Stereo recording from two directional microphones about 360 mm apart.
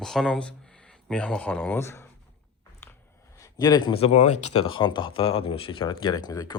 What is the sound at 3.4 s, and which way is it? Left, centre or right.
Speech, centre.